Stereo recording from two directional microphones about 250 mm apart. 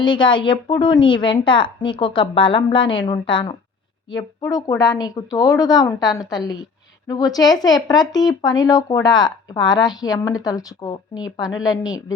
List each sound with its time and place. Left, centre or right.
0.0 s a woman's voice: centre